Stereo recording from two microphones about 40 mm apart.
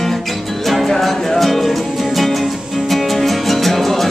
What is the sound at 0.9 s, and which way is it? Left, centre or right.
Music, centre.